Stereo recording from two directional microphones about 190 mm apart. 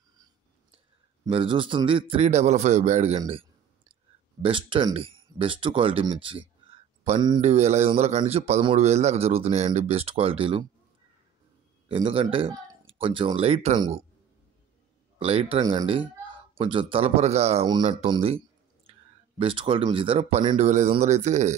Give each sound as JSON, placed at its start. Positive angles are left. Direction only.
{"t": 1.3, "sound": "a man's voice", "side_deg": -25}
{"t": 3.2, "sound": "a sound", "side_deg": -30}
{"t": 4.4, "sound": "a man's voice", "side_deg": -25}
{"t": 11.9, "sound": "speech", "side_deg": -30}
{"t": 15.1, "sound": "a man's voice", "side_deg": -30}
{"t": 17.6, "sound": "speech", "side_deg": -25}